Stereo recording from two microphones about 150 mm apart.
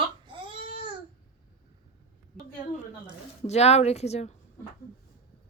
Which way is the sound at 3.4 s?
45° left (ahead or behind).